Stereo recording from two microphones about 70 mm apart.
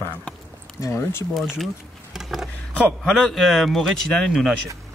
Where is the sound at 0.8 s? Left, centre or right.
Left.